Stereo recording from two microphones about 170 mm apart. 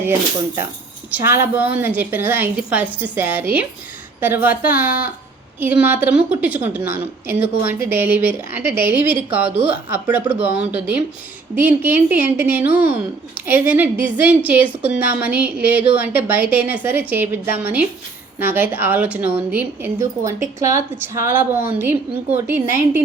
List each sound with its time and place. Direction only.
1.1 s a woman's voice: 15° right (ahead or behind)